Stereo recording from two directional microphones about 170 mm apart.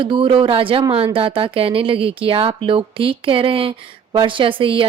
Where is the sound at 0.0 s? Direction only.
30° right (ahead or behind).